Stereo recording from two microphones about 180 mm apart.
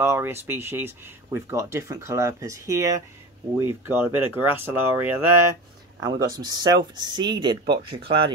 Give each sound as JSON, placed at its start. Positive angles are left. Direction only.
{"t": 0.0, "sound": "speech", "side_deg": -15}
{"t": 7.6, "sound": "speech", "side_deg": -65}